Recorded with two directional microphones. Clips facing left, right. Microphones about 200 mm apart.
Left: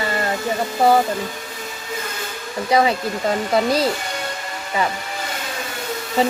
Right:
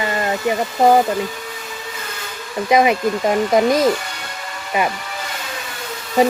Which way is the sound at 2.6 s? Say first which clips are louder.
Right 3 dB; 20° right (ahead or behind).